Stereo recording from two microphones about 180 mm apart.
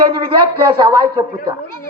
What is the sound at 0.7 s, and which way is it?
Speech, 25° right (ahead or behind).